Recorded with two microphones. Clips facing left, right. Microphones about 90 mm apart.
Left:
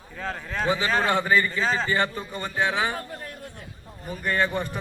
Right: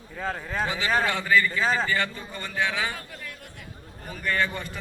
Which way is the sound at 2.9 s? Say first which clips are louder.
Left 5 dB; 40° left (ahead or behind).